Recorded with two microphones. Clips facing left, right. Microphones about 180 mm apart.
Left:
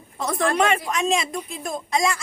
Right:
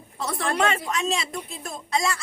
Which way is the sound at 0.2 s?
15° left (ahead or behind).